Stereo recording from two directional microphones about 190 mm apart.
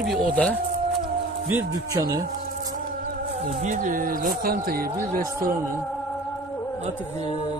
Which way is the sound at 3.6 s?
40° right (ahead or behind).